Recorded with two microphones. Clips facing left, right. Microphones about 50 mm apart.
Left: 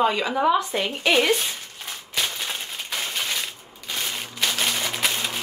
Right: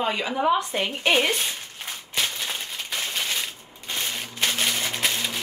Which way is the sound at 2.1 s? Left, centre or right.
Centre.